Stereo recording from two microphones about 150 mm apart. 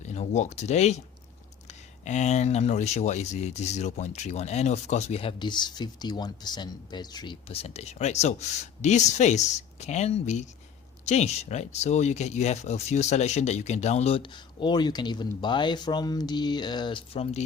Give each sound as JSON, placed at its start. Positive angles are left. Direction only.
{"t": 0.0, "sound": "speech", "side_deg": 50}
{"t": 5.4, "sound": "speech", "side_deg": 30}